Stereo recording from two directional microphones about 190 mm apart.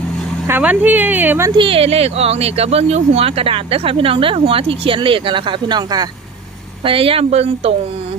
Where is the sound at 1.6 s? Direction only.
30° right (ahead or behind).